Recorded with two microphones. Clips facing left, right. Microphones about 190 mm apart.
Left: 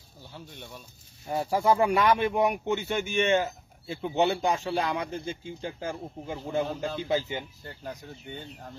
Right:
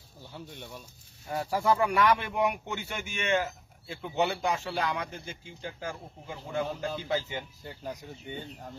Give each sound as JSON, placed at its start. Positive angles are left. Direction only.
{"t": 1.3, "sound": "speech", "side_deg": 20}
{"t": 7.6, "sound": "speech", "side_deg": -5}